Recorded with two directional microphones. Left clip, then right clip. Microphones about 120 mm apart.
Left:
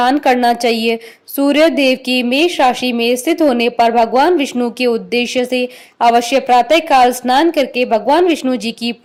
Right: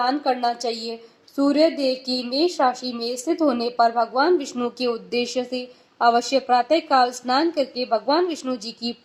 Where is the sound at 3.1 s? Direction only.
55° left (ahead or behind).